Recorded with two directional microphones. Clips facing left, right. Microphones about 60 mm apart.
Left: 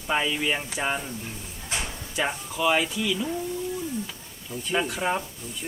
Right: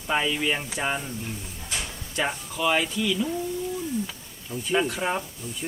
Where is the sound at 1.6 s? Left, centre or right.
Left.